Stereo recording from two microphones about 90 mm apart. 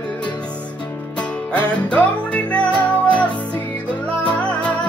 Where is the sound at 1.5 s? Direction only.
15° left (ahead or behind).